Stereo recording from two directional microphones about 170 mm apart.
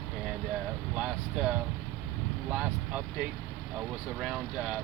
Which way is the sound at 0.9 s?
5° right (ahead or behind).